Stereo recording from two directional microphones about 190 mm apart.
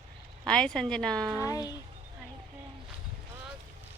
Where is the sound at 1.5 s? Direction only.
20° left (ahead or behind).